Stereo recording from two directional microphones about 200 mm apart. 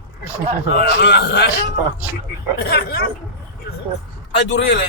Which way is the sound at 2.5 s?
50° left (ahead or behind).